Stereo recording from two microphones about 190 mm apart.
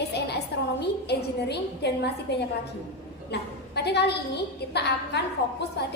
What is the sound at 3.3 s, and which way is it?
A woman's voice, 60° left (ahead or behind).